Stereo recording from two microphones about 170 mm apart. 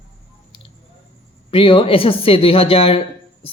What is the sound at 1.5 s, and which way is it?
A woman's voice, 30° left (ahead or behind).